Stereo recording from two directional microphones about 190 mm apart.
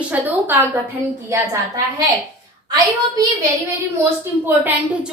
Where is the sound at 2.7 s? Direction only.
20° right (ahead or behind).